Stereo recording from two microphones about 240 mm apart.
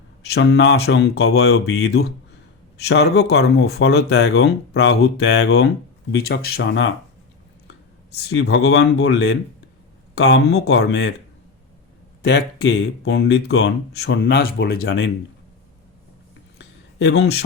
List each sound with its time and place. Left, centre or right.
0.3 s speech: left
8.3 s speech: left
12.2 s speech: left
16.6 s a sound: left